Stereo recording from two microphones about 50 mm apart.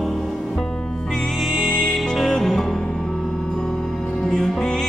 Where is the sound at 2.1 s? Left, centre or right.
Centre.